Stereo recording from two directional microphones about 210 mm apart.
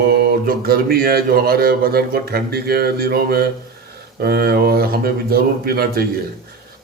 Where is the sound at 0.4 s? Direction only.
45° right (ahead or behind).